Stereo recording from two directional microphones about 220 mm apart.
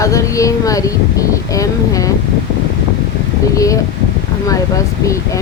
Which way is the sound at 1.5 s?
15° left (ahead or behind).